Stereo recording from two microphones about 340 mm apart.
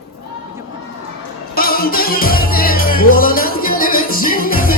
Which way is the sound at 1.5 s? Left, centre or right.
Left.